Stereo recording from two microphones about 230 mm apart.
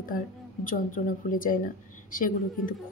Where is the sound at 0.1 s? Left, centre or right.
Left.